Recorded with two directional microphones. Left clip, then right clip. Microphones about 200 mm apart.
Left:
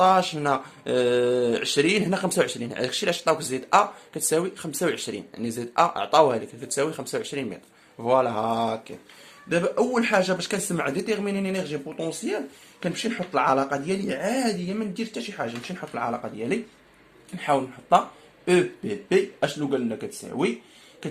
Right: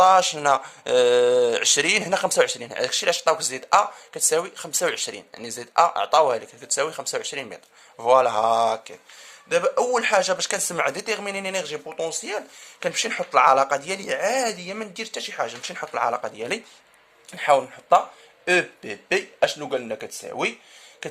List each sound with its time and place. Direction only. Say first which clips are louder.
0.0 s a man's voice: right 4 dB; 35° right (ahead or behind); by 20.5 s 55° right (ahead or behind)